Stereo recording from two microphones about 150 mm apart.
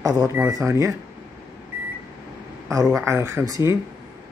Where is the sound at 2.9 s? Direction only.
15° right (ahead or behind).